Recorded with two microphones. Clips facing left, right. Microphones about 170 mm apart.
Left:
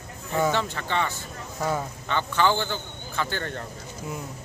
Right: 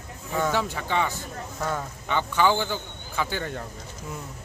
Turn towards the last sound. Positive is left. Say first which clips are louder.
# right 1 dB
turn(degrees=-5)  # may be behind; listen again after turning